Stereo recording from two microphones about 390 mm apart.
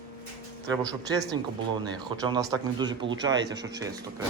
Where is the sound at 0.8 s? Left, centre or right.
Centre.